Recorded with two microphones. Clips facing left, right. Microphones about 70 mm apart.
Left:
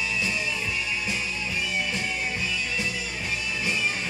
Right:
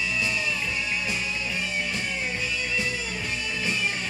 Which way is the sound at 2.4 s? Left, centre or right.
Right.